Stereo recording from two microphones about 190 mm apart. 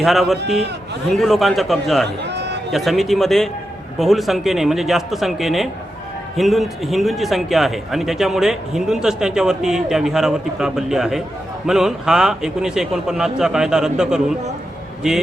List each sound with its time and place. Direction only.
0.0 s a man's voice: centre (ahead or behind)
2.2 s a sound: 65° right (ahead or behind)
2.7 s a man's voice: centre (ahead or behind)